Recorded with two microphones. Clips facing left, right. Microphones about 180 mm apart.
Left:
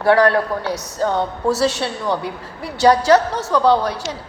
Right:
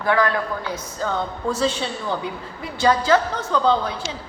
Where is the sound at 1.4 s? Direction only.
75° left (ahead or behind).